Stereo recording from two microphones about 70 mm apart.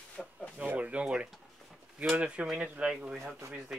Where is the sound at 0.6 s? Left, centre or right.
Centre.